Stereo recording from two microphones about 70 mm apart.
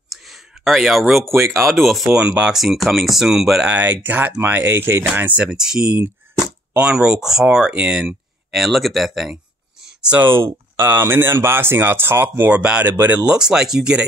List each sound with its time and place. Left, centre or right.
0.1 s a sound: centre
1.3 s speech: right
1.7 s speech: centre
2.0 s speech: centre
2.5 s speech: centre
3.6 s speech: right
5.4 s speech: centre
8.5 s speech: centre
10.1 s speech: right
12.5 s speech: right
13.2 s speech: centre